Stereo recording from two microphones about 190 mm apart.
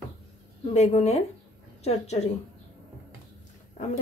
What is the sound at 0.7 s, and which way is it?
A woman's voice, 35° left (ahead or behind).